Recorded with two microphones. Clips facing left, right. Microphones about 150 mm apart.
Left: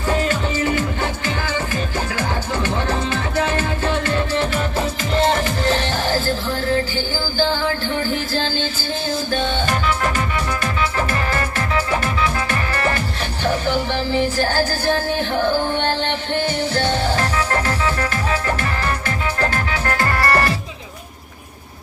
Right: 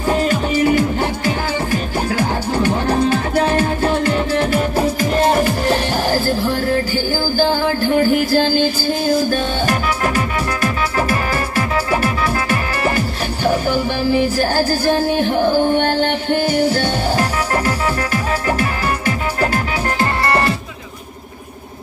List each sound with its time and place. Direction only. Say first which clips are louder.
0.1 s music: right 4 dB; 15° right (ahead or behind)
2.6 s music: right 8 dB; 15° right (ahead or behind)
4.1 s music: right 4 dB; 10° right (ahead or behind)
7.3 s music: right 3 dB; 10° right (ahead or behind)
20.0 s music: right 1 dB; 25° right (ahead or behind)